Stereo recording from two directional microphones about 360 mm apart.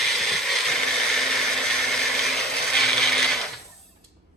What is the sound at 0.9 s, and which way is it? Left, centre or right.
Blender, centre.